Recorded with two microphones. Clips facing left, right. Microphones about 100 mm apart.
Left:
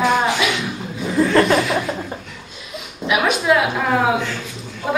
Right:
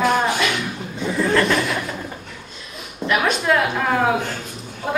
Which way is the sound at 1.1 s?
35° left (ahead or behind).